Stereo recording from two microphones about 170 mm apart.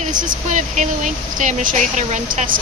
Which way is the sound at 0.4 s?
45° right (ahead or behind).